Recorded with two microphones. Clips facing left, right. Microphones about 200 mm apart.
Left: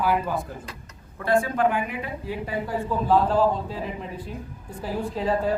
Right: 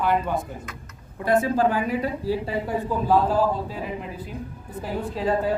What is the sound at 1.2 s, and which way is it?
A woman's voice, 20° right (ahead or behind).